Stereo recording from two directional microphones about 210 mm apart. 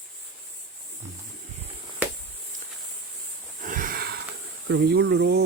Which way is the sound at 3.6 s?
40° right (ahead or behind).